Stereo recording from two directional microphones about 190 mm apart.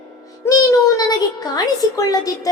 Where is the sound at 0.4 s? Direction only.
15° left (ahead or behind).